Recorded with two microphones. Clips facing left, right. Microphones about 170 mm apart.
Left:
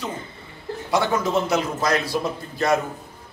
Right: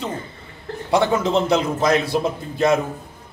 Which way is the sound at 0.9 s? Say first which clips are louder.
Right 3 dB; 25° right (ahead or behind).